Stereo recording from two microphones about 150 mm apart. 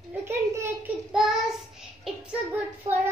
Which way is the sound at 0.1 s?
15° right (ahead or behind).